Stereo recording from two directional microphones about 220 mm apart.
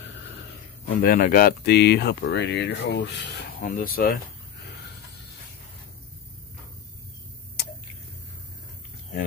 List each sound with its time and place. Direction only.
0.8 s speech: 40° left (ahead or behind)
3.7 s speech: 40° left (ahead or behind)